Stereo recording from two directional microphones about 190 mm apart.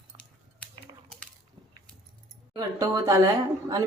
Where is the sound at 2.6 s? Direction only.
15° right (ahead or behind).